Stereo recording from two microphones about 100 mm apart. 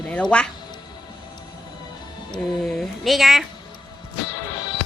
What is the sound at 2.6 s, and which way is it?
Speech, 5° left (ahead or behind).